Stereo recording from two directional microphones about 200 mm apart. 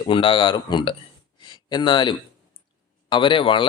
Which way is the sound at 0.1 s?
25° left (ahead or behind).